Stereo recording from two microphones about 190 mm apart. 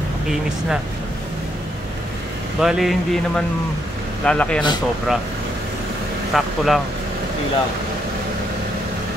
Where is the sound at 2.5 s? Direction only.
Centre (ahead or behind).